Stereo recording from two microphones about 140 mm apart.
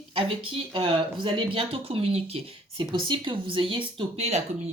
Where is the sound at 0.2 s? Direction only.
40° right (ahead or behind).